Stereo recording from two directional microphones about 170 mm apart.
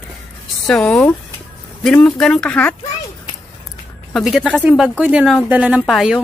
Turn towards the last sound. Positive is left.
turn(degrees=-5)  # may be behind; listen again after turning